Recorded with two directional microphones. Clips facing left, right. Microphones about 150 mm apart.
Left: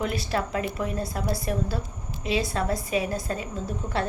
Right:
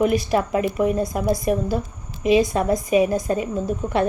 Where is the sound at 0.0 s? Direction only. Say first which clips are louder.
Right 8 dB; 15° right (ahead or behind).